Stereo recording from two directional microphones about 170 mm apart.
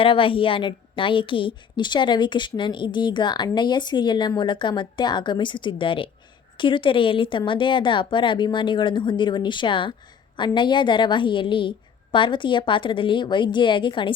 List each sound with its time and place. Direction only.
0.0 s a woman's voice: 30° left (ahead or behind)